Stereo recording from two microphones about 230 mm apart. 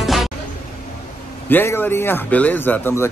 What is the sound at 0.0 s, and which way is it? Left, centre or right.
Vehicle, centre.